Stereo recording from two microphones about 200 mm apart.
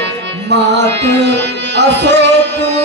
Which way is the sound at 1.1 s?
60° right (ahead or behind).